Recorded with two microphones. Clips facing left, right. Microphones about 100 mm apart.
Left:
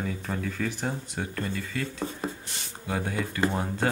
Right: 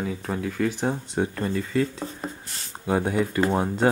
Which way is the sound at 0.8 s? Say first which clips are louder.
Right 7 dB; 25° right (ahead or behind).